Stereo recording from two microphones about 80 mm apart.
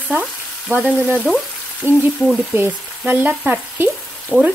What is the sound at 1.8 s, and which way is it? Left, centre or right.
Frying, right.